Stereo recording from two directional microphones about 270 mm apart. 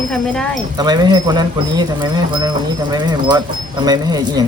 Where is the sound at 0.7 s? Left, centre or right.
Centre.